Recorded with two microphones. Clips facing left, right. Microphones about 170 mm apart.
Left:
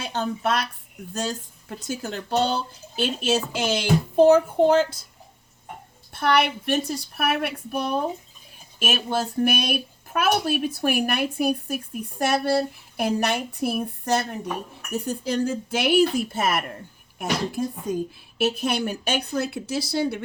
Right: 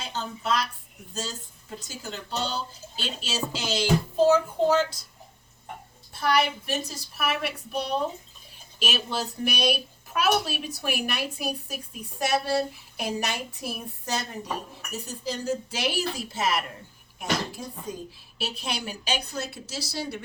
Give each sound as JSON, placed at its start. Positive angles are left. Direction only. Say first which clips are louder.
{"t": 0.0, "sound": "speech", "louder": "left 7 dB", "side_deg": 60}
{"t": 6.1, "sound": "speech", "louder": "left 3 dB", "side_deg": 60}
{"t": 18.3, "sound": "speech", "louder": "left 10 dB", "side_deg": 50}